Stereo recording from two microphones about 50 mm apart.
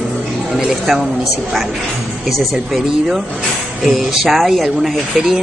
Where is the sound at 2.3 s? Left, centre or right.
Centre.